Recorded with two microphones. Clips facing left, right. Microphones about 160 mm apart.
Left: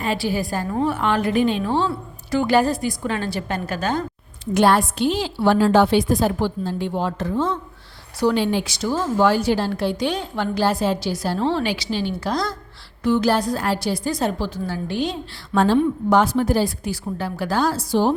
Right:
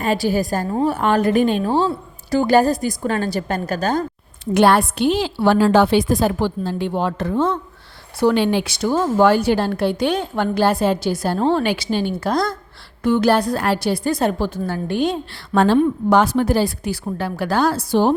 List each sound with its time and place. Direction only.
0.0 s a woman's voice: 45° right (ahead or behind)
4.5 s a woman's voice: 65° right (ahead or behind)